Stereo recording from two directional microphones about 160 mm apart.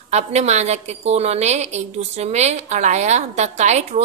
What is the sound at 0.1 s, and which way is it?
A woman's voice, 45° right (ahead or behind).